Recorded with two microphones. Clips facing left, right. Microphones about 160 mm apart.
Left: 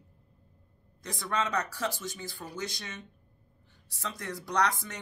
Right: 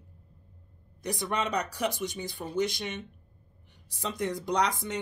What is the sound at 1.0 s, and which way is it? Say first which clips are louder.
Speech: right 2 dB; 20° right (ahead or behind).